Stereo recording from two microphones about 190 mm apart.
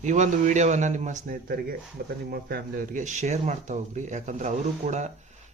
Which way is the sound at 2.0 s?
55° right (ahead or behind).